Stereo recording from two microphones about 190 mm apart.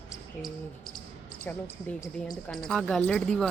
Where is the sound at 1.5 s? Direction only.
10° left (ahead or behind).